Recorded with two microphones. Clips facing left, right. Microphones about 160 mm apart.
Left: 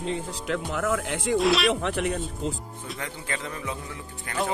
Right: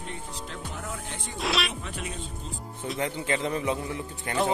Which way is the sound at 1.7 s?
75° left (ahead or behind).